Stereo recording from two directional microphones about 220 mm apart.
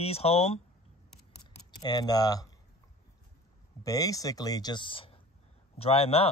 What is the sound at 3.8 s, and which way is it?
Speech, 15° left (ahead or behind).